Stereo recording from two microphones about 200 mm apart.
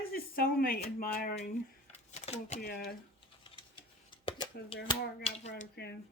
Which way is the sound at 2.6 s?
50° left (ahead or behind).